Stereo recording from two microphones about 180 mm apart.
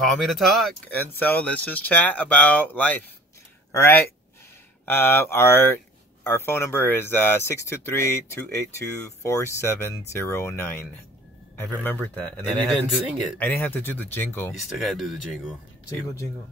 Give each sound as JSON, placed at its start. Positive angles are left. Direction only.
{"t": 0.1, "sound": "speech", "side_deg": 0}
{"t": 14.7, "sound": "speech", "side_deg": 0}